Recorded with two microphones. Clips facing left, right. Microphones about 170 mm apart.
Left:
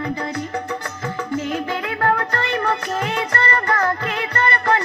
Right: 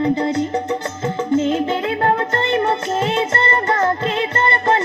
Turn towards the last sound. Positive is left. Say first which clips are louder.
# right 2 dB
turn(degrees=-20)  # may be behind; listen again after turning